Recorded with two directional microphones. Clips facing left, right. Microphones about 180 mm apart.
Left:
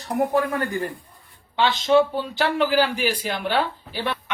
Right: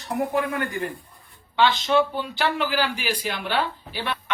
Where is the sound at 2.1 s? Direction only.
35° left (ahead or behind).